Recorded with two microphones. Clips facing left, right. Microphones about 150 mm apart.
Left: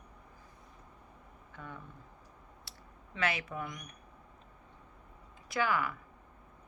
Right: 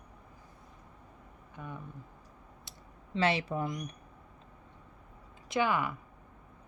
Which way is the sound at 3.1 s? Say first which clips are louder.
Right 6 dB; 30° right (ahead or behind).